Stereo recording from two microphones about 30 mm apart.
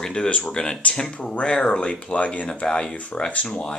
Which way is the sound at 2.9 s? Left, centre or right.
Left.